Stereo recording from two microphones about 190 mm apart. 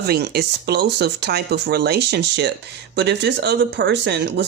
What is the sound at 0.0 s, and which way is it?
Speech, 60° right (ahead or behind).